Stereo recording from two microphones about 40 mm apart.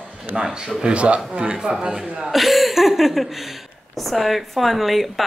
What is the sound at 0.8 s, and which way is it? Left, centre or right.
Speech, right.